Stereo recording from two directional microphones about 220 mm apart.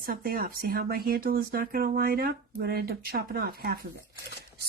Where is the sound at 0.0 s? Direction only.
40° right (ahead or behind).